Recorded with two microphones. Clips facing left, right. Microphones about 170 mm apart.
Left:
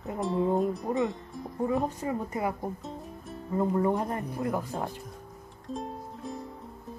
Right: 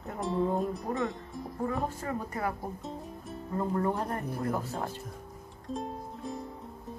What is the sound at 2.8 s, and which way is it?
Music, centre (ahead or behind).